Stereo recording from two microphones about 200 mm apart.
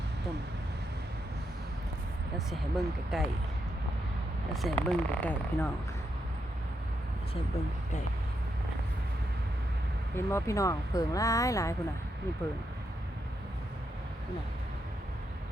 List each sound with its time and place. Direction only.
2.5 s speech: centre (ahead or behind)
4.5 s speech: centre (ahead or behind)
10.2 s speech: 15° left (ahead or behind)